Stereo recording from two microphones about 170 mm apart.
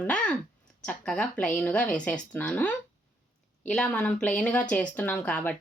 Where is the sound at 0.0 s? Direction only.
5° left (ahead or behind).